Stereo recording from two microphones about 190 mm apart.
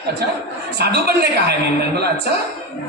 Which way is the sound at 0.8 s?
60° right (ahead or behind).